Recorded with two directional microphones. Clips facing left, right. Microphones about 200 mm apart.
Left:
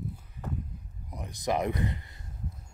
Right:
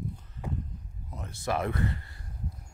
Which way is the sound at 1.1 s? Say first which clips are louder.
Left 2 dB; 15° left (ahead or behind).